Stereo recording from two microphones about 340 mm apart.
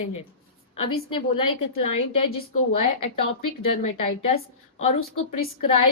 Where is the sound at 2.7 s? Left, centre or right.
Left.